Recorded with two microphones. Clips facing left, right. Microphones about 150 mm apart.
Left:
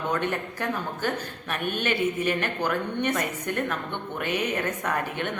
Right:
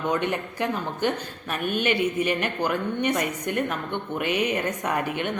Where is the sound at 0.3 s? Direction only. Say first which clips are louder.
Right 2 dB; 15° right (ahead or behind).